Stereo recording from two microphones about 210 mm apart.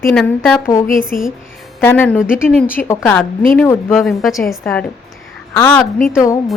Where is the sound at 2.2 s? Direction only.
5° right (ahead or behind).